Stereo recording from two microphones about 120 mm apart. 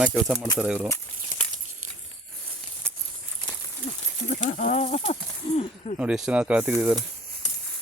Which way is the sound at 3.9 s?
60° left (ahead or behind).